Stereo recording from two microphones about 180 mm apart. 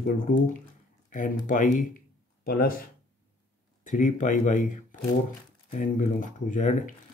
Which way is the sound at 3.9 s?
45° left (ahead or behind).